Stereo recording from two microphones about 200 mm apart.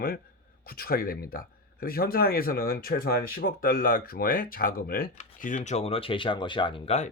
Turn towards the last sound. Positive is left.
turn(degrees=30)  # may be behind; listen again after turning